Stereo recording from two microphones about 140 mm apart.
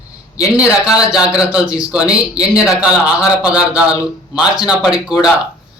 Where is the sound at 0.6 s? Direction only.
10° right (ahead or behind).